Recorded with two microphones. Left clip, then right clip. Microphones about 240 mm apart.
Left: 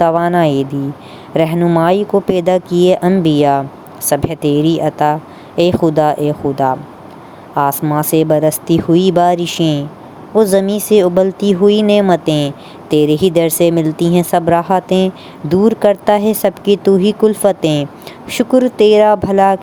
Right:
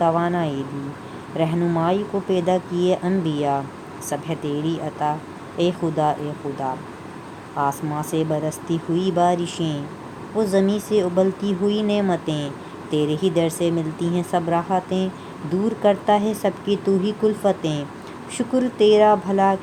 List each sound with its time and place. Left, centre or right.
0.0 s speech: left